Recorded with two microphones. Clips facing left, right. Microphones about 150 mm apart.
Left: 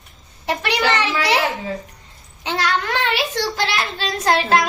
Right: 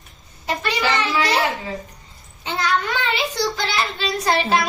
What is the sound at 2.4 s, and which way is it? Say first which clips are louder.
A child's voice: left 1 dB; 85° left.